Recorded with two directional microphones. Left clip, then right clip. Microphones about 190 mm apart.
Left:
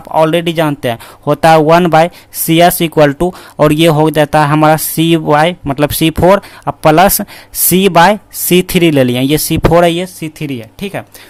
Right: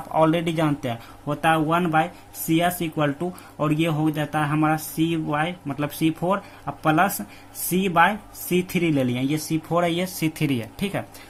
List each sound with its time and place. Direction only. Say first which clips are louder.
0.1 s speech: left 10 dB; 35° left (ahead or behind)
1.3 s speech: left 15 dB; 55° left (ahead or behind); by 10.0 s 40° left (ahead or behind)
10.0 s speech: left 5 dB; 20° left (ahead or behind)